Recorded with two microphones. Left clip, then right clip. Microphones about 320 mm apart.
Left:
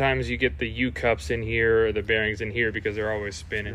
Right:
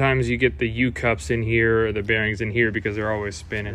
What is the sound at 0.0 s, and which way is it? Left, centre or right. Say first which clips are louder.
Speech: right 3 dB; centre.